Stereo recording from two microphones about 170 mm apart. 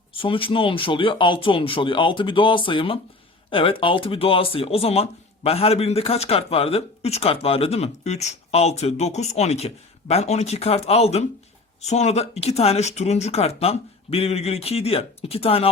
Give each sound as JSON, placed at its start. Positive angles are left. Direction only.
{"t": 0.1, "sound": "speech", "side_deg": 30}